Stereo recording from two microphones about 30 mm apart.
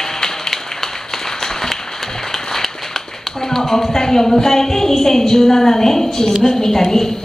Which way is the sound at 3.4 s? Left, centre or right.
Centre.